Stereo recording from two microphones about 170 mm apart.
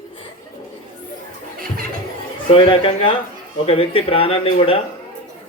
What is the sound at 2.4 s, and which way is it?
Speech, 35° left (ahead or behind).